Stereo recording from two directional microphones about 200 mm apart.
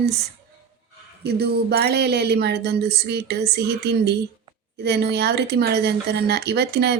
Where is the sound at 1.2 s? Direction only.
55° right (ahead or behind).